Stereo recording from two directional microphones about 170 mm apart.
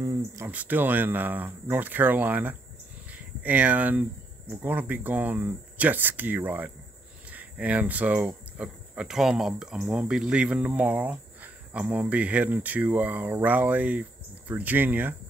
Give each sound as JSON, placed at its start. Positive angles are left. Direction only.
{"t": 0.0, "sound": "speech", "side_deg": -20}
{"t": 0.5, "sound": "speech", "side_deg": -10}
{"t": 3.1, "sound": "a sound", "side_deg": -10}
{"t": 4.5, "sound": "speech", "side_deg": -10}